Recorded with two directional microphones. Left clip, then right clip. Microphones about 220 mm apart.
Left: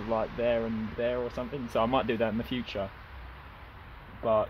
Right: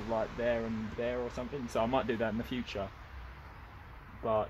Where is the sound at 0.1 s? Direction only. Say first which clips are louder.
Left 4 dB; 20° left (ahead or behind).